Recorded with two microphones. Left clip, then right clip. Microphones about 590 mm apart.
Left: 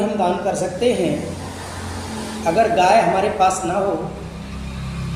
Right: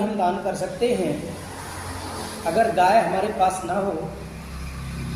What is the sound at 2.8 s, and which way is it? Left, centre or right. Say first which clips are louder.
Speech: left 3 dB; right.